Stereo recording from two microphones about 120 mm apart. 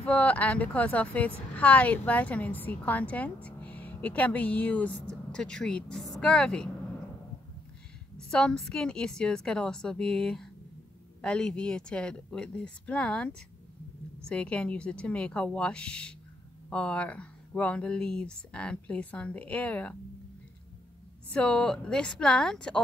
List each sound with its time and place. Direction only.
0.0 s speech: 10° left (ahead or behind)
8.3 s speech: 5° left (ahead or behind)
21.3 s speech: 10° left (ahead or behind)